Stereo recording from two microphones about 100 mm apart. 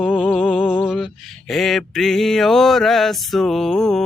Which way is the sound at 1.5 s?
Centre (ahead or behind).